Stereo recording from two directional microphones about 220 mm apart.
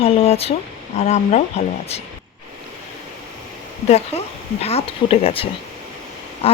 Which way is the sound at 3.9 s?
30° left (ahead or behind).